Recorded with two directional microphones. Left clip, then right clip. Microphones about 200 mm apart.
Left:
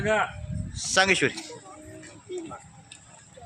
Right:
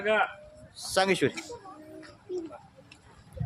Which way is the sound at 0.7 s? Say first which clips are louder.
Left 4 dB; 5° right (ahead or behind).